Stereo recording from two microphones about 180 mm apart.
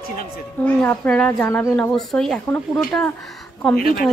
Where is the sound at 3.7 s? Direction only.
60° left (ahead or behind).